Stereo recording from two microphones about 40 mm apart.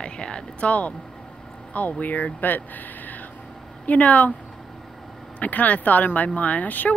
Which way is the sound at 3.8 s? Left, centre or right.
Left.